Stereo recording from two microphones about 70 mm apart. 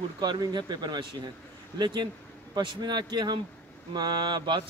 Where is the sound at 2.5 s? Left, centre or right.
Right.